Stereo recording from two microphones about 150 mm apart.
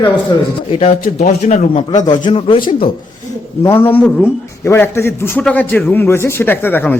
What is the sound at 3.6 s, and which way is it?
Speech, 15° left (ahead or behind).